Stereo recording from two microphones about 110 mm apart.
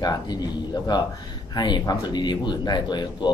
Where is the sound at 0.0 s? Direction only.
40° left (ahead or behind).